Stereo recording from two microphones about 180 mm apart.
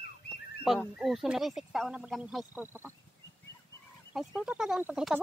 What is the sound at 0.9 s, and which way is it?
Speech, centre (ahead or behind).